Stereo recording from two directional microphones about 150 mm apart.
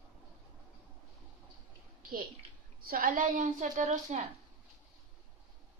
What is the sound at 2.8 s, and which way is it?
A woman's voice, 75° right (ahead or behind).